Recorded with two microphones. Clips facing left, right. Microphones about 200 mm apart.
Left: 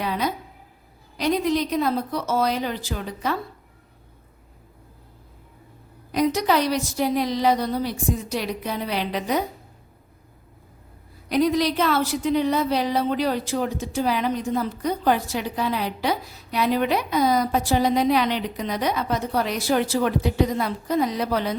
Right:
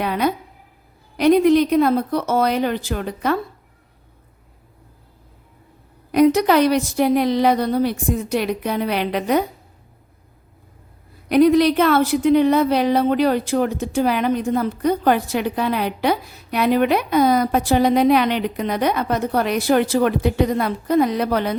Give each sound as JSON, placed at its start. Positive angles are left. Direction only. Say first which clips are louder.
{"t": 0.0, "sound": "a sound", "louder": "right 5 dB", "side_deg": -60}
{"t": 1.1, "sound": "a woman's voice", "louder": "right 9 dB", "side_deg": -60}
{"t": 6.1, "sound": "a woman's voice", "louder": "right 7 dB", "side_deg": -60}
{"t": 11.3, "sound": "a woman's voice", "louder": "right 7 dB", "side_deg": -60}